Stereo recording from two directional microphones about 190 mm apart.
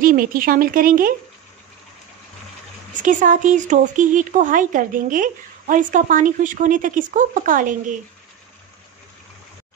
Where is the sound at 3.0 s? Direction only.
40° right (ahead or behind).